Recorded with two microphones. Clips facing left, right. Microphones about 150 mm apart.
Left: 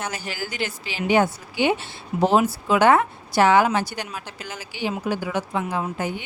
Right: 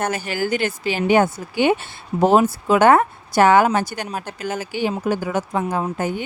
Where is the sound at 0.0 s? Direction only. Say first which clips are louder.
Right 8 dB; 55° right (ahead or behind).